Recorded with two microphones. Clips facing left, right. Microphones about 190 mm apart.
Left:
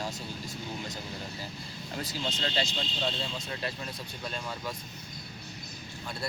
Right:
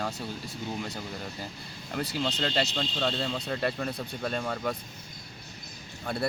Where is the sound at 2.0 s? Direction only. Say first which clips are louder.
Right 5 dB; 65° right (ahead or behind).